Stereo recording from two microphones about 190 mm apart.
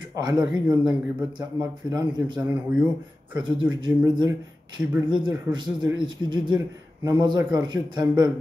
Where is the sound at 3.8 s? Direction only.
20° right (ahead or behind).